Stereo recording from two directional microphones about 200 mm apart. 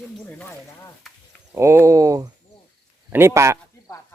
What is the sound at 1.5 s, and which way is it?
Speech, 15° right (ahead or behind).